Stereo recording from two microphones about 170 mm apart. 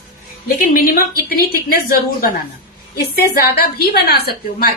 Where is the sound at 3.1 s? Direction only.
65° left (ahead or behind).